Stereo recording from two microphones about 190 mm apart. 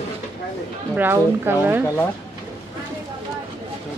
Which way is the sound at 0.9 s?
10° right (ahead or behind).